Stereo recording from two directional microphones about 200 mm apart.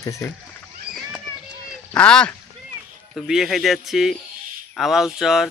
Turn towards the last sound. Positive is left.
turn(degrees=0)  # may be behind; listen again after turning